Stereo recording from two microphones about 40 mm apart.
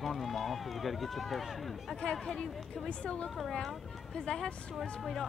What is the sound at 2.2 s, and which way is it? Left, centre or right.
A woman's voice, centre.